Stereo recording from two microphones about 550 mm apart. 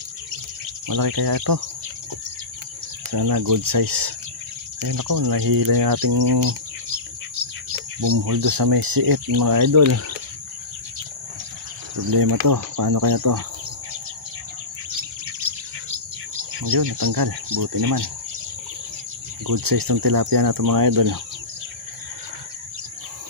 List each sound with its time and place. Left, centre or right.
0.8 s speech: right
3.1 s speech: right
8.0 s speech: right
12.1 s speech: right
16.6 s speech: right
19.4 s speech: right